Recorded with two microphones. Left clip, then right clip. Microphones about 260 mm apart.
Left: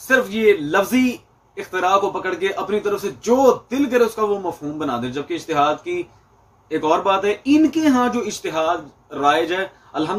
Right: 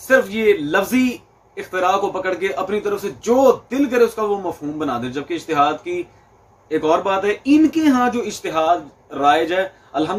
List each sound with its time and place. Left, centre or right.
0.1 s a man's voice: centre